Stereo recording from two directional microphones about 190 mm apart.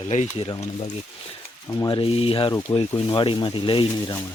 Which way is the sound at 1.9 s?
30° left (ahead or behind).